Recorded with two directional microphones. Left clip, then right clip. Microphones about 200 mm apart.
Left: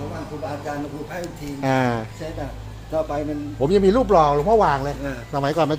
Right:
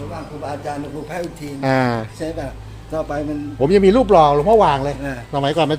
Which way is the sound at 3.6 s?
35° right (ahead or behind).